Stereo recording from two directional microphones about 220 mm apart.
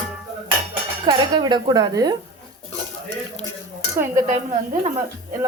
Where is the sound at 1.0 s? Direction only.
20° right (ahead or behind).